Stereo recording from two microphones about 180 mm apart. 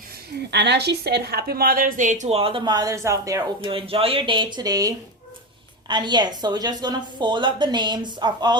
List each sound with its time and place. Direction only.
0.5 s a woman's voice: 70° right (ahead or behind); by 3.7 s 20° right (ahead or behind)
3.7 s a woman's voice: 30° right (ahead or behind)